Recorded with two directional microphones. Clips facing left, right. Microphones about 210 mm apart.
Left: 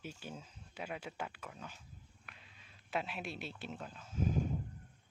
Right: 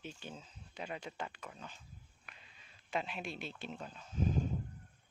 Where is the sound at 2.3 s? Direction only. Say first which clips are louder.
Even; centre (ahead or behind).